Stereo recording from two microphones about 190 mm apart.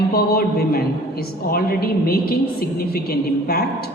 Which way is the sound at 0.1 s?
55° left (ahead or behind).